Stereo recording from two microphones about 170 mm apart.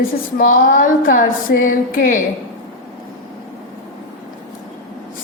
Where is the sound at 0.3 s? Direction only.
50° left (ahead or behind).